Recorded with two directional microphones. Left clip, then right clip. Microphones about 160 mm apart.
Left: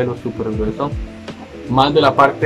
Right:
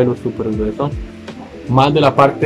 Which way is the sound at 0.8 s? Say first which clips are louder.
Right 1 dB; 10° right (ahead or behind).